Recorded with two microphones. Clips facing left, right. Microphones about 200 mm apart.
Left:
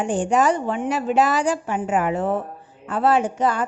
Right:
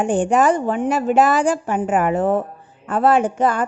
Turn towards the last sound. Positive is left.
turn(degrees=-55)  # may be behind; listen again after turning